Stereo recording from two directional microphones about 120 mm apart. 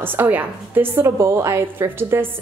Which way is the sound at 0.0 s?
15° right (ahead or behind).